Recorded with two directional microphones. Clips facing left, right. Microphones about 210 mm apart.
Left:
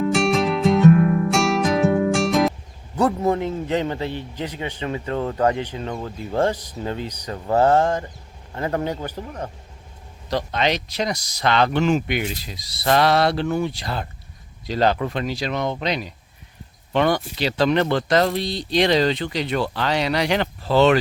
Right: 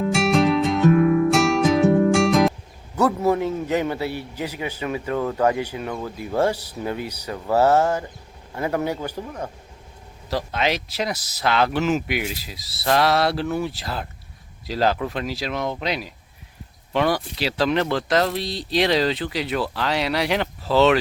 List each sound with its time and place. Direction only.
0.1 s music: centre (ahead or behind)
2.9 s a man's voice: 10° left (ahead or behind)
3.3 s a man's voice: 10° right (ahead or behind)
5.1 s speech: 25° left (ahead or behind)
5.5 s a man's voice: 10° right (ahead or behind)
5.8 s speech: 20° left (ahead or behind)
6.4 s a man's voice: 10° right (ahead or behind)
10.2 s speech: 5° right (ahead or behind)